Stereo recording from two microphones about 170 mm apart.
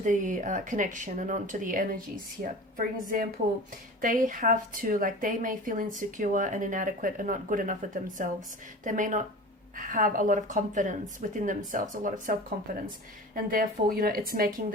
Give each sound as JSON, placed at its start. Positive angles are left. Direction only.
{"t": 0.0, "sound": "a woman's voice", "side_deg": -50}